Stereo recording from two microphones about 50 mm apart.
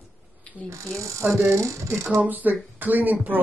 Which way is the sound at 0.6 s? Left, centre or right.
Right.